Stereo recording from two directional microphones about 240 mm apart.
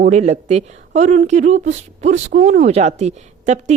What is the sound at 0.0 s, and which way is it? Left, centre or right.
A woman's voice, right.